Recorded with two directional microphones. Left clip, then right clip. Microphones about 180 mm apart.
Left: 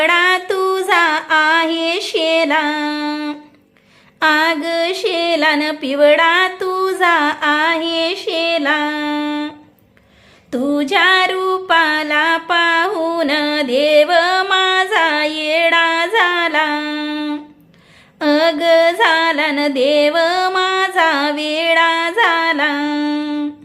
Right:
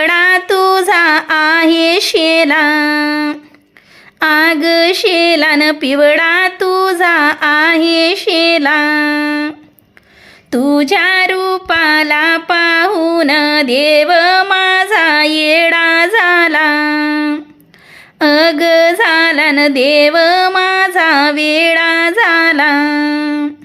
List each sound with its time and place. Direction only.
0.0 s female singing: 30° right (ahead or behind)
4.2 s music: 30° right (ahead or behind)